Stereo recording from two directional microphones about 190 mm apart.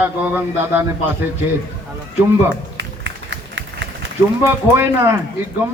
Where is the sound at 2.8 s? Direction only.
70° right (ahead or behind).